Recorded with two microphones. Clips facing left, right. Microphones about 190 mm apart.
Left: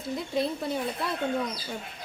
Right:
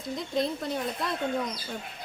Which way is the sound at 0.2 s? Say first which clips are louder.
Even; 5° left (ahead or behind).